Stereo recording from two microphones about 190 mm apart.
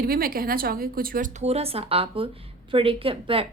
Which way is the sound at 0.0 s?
50° right (ahead or behind).